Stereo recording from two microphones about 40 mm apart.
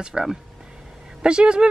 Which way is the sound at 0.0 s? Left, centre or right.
Centre.